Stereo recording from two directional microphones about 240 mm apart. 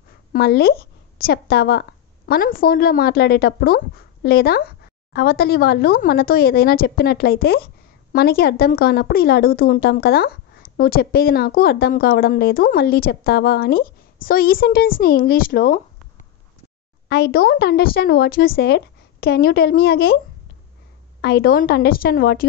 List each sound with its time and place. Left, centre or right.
0.3 s a woman's voice: left
21.2 s a woman's voice: left